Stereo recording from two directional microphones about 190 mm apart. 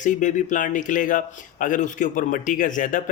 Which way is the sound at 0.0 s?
40° left (ahead or behind).